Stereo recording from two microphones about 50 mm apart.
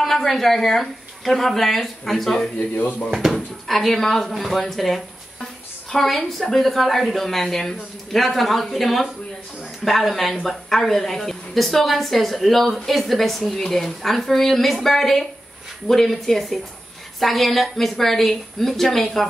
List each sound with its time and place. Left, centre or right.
0.0 s speech: centre
2.8 s speech: left
3.2 s speech: centre